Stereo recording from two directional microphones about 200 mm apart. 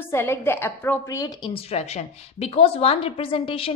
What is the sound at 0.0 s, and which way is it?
A woman's voice, 10° left (ahead or behind).